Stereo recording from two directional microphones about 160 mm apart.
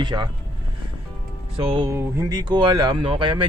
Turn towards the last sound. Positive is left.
turn(degrees=-30)  # may be behind; listen again after turning